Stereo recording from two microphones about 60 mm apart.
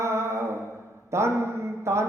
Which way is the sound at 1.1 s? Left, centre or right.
Right.